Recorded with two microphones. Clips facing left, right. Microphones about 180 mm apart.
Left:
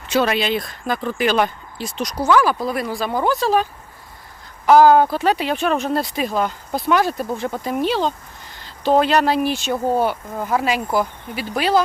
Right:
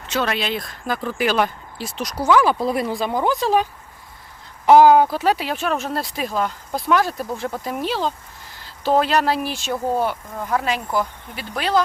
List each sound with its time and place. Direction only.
0.1 s speech: 5° left (ahead or behind)
2.4 s speech: 25° right (ahead or behind); by 11.8 s 5° left (ahead or behind)